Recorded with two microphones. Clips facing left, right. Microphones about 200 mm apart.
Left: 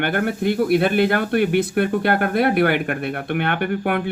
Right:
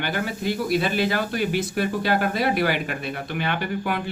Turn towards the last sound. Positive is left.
turn(degrees=60)  # may be behind; listen again after turning